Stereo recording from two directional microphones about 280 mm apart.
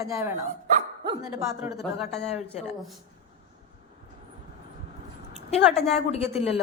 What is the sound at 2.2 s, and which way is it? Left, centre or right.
Speech, left.